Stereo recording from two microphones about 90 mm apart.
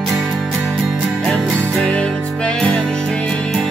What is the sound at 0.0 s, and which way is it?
Music, centre (ahead or behind).